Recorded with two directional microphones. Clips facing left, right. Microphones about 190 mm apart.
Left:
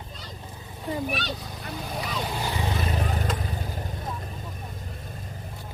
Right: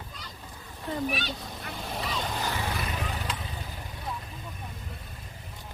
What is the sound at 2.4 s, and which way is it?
Vehicle, 15° left (ahead or behind).